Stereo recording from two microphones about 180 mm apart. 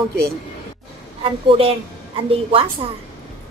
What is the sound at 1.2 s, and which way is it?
A woman's voice, 30° right (ahead or behind).